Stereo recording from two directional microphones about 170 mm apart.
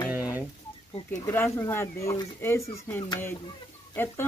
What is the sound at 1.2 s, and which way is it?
Speech, 10° left (ahead or behind).